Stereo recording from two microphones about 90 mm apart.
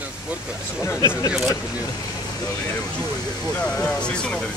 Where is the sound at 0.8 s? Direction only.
30° left (ahead or behind).